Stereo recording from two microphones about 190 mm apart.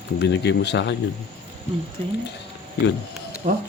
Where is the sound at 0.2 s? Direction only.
65° left (ahead or behind).